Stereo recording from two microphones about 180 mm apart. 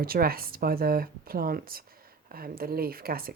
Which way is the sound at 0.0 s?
55° right (ahead or behind).